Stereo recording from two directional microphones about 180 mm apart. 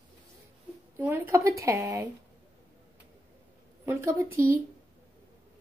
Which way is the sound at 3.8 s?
15° right (ahead or behind).